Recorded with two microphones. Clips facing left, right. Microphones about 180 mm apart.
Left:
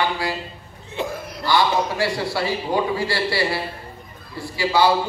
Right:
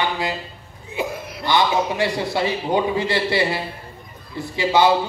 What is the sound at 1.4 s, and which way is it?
A man's voice, 20° right (ahead or behind).